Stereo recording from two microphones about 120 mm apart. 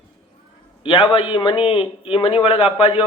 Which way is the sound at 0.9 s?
45° left (ahead or behind).